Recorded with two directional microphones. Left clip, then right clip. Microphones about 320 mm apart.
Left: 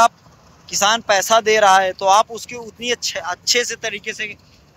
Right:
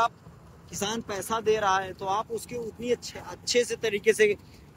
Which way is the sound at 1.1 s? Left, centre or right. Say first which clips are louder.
Left 16 dB; left.